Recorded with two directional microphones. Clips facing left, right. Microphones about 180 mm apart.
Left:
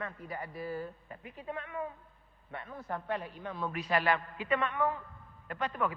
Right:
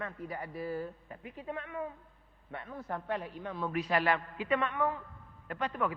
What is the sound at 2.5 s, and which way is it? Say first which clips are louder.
A man's voice: even; 20° right (ahead or behind).